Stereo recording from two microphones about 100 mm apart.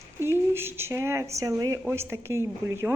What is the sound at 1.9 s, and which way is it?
A woman's voice, 25° right (ahead or behind).